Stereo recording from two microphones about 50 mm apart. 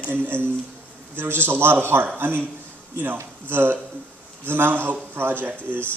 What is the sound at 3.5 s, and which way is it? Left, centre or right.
A man's voice, right.